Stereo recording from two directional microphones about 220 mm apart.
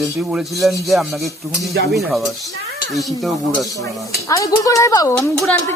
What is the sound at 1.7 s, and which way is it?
Dishes, 50° right (ahead or behind).